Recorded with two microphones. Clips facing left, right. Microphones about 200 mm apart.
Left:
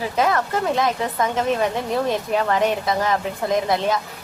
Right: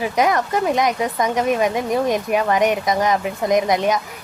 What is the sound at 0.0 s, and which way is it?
A woman's voice, 15° right (ahead or behind).